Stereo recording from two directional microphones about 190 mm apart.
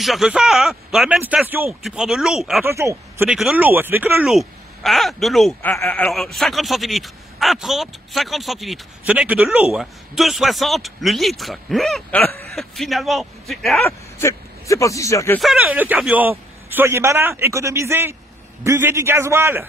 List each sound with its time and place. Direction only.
0.0 s speech: centre (ahead or behind)
2.6 s a man's voice: 15° right (ahead or behind)
3.3 s speech: 5° right (ahead or behind)
13.8 s speech: 15° left (ahead or behind)
15.3 s a man's voice: 5° right (ahead or behind)